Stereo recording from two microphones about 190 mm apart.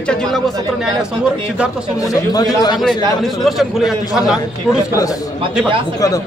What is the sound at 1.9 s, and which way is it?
Speech, 20° left (ahead or behind).